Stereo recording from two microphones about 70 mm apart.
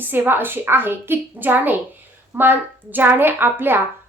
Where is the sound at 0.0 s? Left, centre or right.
Right.